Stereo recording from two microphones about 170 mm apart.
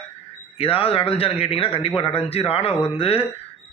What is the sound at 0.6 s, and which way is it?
Speech, 35° left (ahead or behind).